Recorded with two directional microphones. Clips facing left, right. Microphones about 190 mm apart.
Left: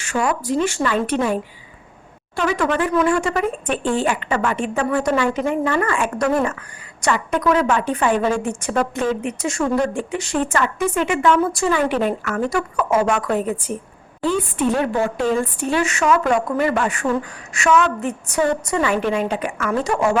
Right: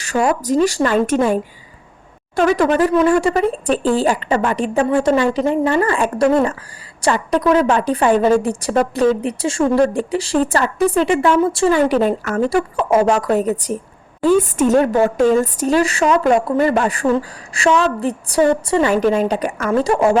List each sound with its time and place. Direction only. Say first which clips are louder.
0.0 s a woman's voice: right 4 dB; 40° right (ahead or behind)